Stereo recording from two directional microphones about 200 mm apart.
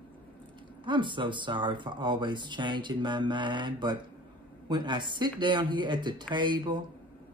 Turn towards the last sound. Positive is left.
turn(degrees=-25)  # may be behind; listen again after turning